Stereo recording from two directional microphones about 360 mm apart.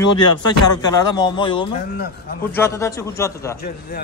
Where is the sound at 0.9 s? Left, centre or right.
Centre.